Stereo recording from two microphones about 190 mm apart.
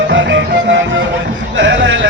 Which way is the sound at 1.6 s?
75° right (ahead or behind).